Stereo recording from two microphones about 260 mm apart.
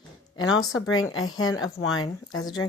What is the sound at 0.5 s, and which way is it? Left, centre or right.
Speech, left.